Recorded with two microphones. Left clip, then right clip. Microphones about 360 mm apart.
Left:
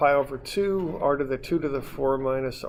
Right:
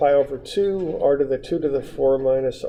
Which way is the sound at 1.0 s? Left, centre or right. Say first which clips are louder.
Right 6 dB; left.